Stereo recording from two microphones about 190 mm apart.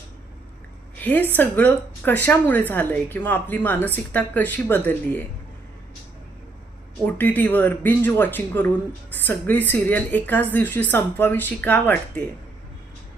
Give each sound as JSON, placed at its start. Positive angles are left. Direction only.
{"t": 0.9, "sound": "a woman's voice", "side_deg": 10}
{"t": 7.0, "sound": "a woman's voice", "side_deg": 10}